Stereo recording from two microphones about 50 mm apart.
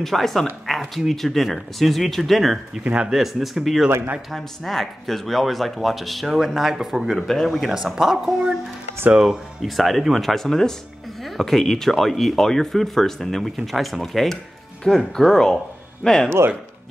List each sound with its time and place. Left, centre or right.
0.0 s speech: centre
2.8 s speech: right
3.1 s speech: centre
7.2 s speech: centre
9.6 s a man's voice: centre